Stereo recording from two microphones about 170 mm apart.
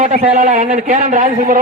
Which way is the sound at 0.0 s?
45° right (ahead or behind).